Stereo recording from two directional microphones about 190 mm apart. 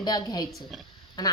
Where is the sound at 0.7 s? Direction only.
Centre (ahead or behind).